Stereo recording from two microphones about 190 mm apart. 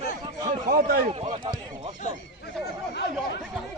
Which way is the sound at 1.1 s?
25° right (ahead or behind).